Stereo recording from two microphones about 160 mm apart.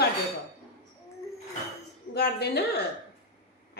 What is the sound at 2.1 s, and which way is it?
Speech, 85° left.